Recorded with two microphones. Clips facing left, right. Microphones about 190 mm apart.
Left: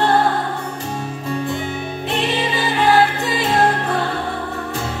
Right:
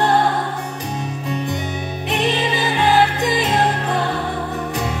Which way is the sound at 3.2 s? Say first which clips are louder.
Right 1 dB; 15° right (ahead or behind).